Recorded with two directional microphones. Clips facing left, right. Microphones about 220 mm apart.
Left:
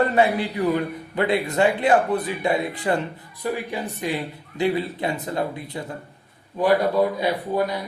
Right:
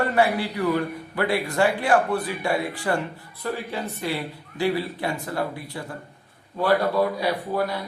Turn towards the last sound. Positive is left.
turn(degrees=20)  # may be behind; listen again after turning